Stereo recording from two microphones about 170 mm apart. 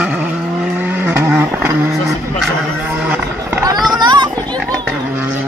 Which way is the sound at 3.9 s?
25° right (ahead or behind).